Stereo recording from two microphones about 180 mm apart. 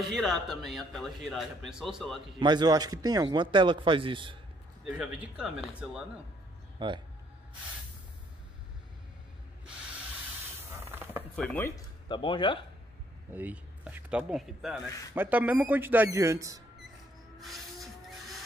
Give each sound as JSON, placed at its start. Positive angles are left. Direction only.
{"t": 0.0, "sound": "a man's voice", "side_deg": 0}
{"t": 2.4, "sound": "speech", "side_deg": -25}
{"t": 4.8, "sound": "a man's voice", "side_deg": -5}
{"t": 6.8, "sound": "speech", "side_deg": -25}
{"t": 10.9, "sound": "a sound", "side_deg": -10}
{"t": 11.3, "sound": "speech", "side_deg": 10}
{"t": 12.1, "sound": "speech", "side_deg": 25}
{"t": 13.3, "sound": "a man's voice", "side_deg": -10}